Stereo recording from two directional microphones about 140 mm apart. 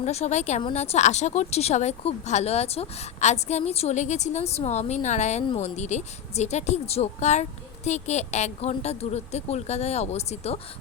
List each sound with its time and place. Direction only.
0.0 s speech: 50° left (ahead or behind)